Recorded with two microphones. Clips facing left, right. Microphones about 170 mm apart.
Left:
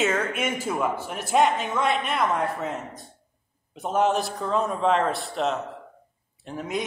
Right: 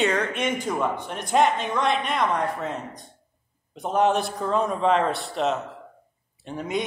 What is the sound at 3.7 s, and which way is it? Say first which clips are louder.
A man's voice: right 1 dB; centre (ahead or behind).